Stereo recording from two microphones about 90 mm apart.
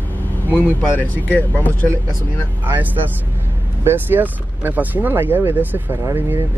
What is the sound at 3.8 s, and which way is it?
Speech, 25° right (ahead or behind).